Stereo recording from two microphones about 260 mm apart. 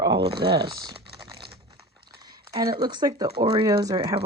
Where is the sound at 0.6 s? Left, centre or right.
Centre.